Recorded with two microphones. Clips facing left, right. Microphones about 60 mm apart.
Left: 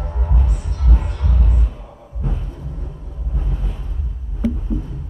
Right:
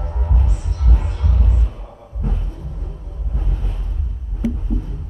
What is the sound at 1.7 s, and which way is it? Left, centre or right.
Heart sounds, centre.